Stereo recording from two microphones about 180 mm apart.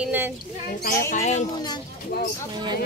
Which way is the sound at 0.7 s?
55° left (ahead or behind).